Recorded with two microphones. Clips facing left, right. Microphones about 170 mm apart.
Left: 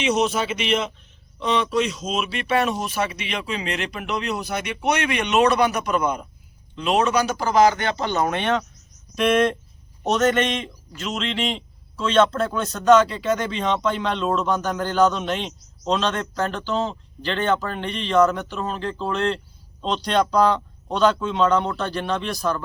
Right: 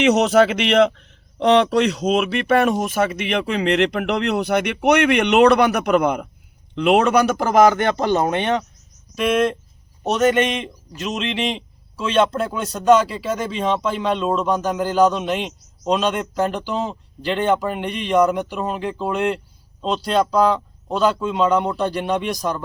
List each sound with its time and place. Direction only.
0.0 s a man's voice: 70° right (ahead or behind); by 8.1 s 50° right (ahead or behind)
8.1 s speech: 25° right (ahead or behind)
9.1 s a man's voice: centre (ahead or behind)